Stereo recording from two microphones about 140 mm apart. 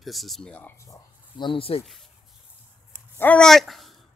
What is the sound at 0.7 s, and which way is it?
Speech, 20° left (ahead or behind).